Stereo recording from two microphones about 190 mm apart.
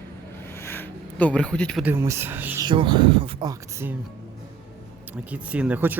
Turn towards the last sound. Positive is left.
turn(degrees=-10)  # may be behind; listen again after turning